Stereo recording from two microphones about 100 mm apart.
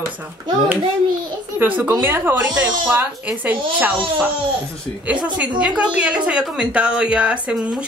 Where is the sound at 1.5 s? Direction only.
15° right (ahead or behind).